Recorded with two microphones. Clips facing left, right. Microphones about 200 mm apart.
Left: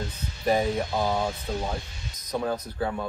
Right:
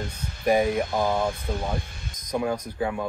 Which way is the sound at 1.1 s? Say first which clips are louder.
Right 2 dB; 50° right (ahead or behind).